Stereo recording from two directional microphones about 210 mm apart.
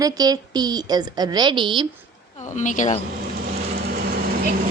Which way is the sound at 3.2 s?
50° right (ahead or behind).